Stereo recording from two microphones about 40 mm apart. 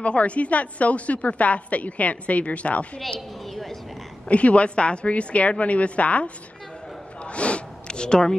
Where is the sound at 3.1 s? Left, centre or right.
Centre.